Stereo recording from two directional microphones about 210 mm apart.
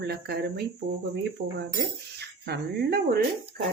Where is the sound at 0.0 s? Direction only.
50° right (ahead or behind).